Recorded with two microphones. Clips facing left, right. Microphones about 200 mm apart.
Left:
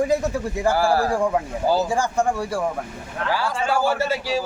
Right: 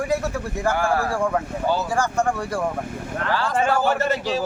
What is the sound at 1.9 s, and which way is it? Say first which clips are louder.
Speech: left 1 dB; 15° left (ahead or behind).